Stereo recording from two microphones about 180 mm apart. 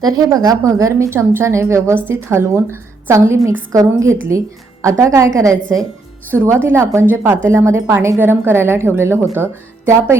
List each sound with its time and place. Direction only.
0.0 s a woman's voice: 20° right (ahead or behind)